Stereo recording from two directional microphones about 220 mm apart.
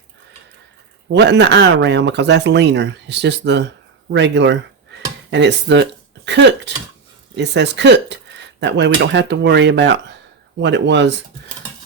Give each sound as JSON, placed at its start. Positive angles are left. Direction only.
{"t": 1.1, "sound": "speech", "side_deg": -50}